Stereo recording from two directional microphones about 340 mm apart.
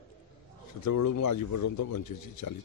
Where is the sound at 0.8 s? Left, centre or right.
Left.